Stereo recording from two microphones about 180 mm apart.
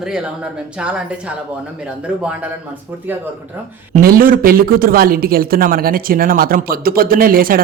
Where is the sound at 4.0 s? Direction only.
55° right (ahead or behind).